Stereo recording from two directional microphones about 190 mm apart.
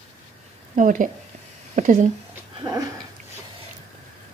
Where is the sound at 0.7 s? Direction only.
45° right (ahead or behind).